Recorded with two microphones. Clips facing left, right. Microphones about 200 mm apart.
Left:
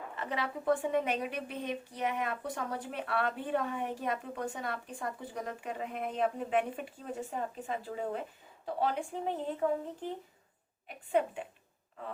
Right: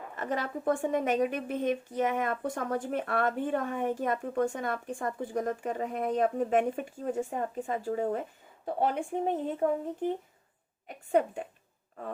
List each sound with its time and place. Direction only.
0.2 s a woman's voice: 45° right (ahead or behind)
9.6 s speech: 40° right (ahead or behind)
10.8 s a woman's voice: 45° right (ahead or behind)